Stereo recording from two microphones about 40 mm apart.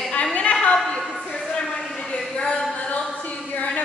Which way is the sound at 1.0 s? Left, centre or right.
Centre.